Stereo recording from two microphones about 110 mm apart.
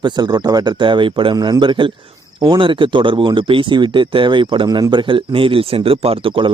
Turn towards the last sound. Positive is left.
turn(degrees=-50)  # may be behind; listen again after turning